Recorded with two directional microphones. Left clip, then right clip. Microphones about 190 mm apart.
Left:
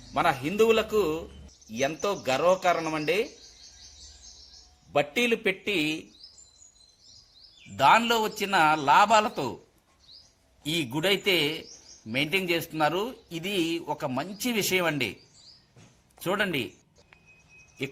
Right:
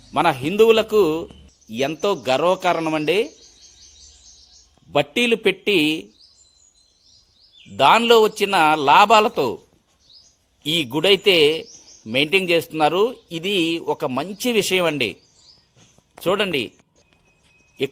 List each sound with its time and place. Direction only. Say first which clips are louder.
0.1 s speech: right 7 dB; 60° right (ahead or behind)
4.9 s speech: right 6 dB; 60° right (ahead or behind)
7.8 s speech: right 8 dB; 60° right (ahead or behind)
10.6 s speech: right 8 dB; 60° right (ahead or behind)
16.2 s speech: right 8 dB; 60° right (ahead or behind)